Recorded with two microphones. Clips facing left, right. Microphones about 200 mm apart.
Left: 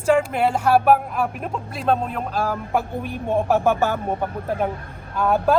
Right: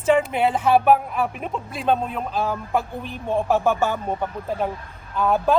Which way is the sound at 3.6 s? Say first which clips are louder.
Left 1 dB; centre (ahead or behind).